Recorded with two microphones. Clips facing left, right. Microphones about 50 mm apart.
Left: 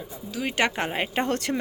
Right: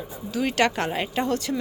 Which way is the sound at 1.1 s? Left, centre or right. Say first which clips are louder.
Even; left.